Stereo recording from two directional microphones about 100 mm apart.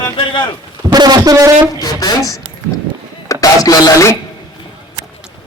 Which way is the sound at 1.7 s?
40° left (ahead or behind).